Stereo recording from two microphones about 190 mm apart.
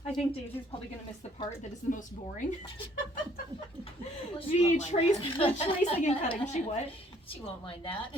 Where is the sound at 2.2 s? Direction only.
30° left (ahead or behind).